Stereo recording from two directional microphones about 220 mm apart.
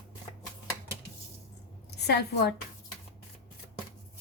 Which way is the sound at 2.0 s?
50° left (ahead or behind).